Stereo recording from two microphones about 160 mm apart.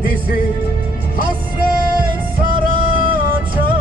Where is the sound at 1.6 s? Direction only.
60° right (ahead or behind).